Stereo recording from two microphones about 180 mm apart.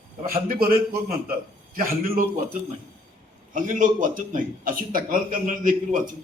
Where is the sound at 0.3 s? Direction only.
55° right (ahead or behind).